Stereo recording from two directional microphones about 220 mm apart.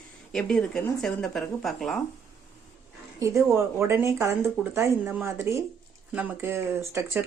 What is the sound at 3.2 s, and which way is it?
Speech, 15° right (ahead or behind).